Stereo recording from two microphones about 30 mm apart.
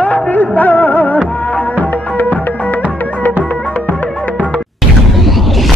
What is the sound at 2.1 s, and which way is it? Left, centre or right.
Music, left.